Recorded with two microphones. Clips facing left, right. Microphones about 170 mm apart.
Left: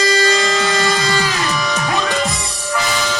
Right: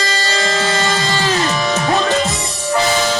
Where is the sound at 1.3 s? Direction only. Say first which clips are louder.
Right 4 dB; 40° right (ahead or behind).